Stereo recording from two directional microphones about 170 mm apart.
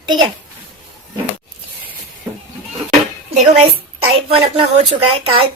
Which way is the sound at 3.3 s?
40° right (ahead or behind).